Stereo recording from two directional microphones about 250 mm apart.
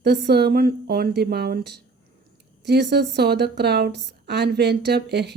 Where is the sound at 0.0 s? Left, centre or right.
Right.